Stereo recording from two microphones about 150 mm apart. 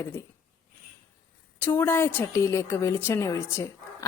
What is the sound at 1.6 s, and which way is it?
A woman's voice, 15° left (ahead or behind).